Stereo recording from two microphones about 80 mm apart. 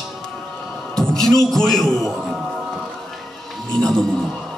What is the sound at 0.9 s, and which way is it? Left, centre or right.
Music, centre.